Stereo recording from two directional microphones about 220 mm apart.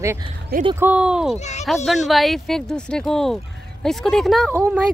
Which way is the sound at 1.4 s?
30° left (ahead or behind).